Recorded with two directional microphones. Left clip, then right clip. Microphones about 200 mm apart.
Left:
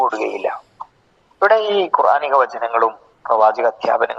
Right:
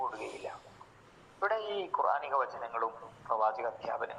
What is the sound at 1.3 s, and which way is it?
Speech, 50° left (ahead or behind).